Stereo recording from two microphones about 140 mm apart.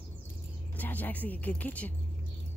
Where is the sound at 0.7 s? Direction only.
10° left (ahead or behind).